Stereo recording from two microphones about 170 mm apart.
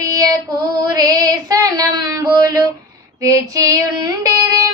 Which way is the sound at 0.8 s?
20° right (ahead or behind).